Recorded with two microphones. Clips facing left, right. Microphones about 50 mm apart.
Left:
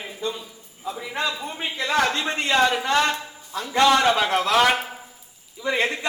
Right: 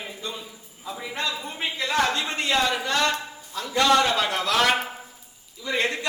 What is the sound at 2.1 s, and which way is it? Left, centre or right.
Speech, left.